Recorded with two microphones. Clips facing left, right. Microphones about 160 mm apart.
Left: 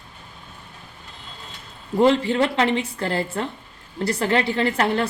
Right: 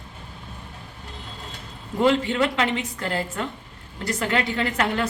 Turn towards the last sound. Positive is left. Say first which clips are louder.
# left 3 dB
turn(degrees=35)  # may be behind; listen again after turning